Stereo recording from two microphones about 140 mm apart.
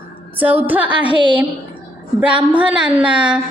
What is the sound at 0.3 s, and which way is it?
Speech, 15° right (ahead or behind).